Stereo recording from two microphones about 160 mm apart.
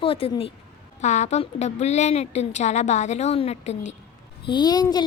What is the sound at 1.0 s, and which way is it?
A woman's voice, 45° left (ahead or behind).